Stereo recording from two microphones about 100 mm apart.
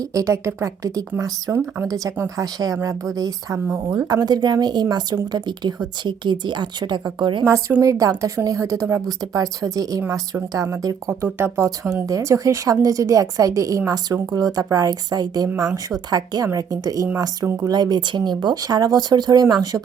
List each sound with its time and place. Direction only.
0.0 s a woman's voice: 35° right (ahead or behind); by 7.4 s 50° right (ahead or behind)
7.8 s a woman's voice: 35° right (ahead or behind)